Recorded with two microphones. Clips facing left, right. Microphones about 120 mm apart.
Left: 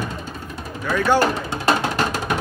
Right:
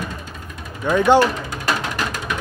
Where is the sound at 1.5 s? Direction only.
35° left (ahead or behind).